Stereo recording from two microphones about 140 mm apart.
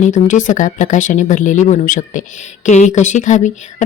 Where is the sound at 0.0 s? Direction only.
65° left (ahead or behind).